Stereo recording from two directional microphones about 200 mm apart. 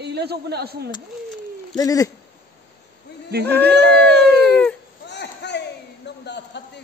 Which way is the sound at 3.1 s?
55° left (ahead or behind).